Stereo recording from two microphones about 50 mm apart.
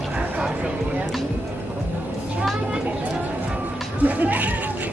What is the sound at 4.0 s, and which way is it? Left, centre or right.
Goat, right.